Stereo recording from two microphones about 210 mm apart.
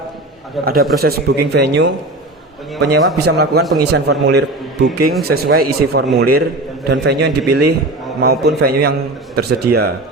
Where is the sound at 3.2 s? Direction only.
50° right (ahead or behind).